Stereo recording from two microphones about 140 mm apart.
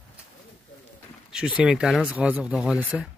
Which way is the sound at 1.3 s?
5° right (ahead or behind).